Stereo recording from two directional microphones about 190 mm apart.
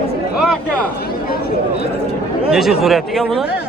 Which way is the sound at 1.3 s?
55° left (ahead or behind).